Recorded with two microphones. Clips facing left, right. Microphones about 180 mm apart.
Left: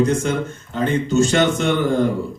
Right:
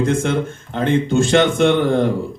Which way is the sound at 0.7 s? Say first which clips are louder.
Right 2 dB; 55° right (ahead or behind).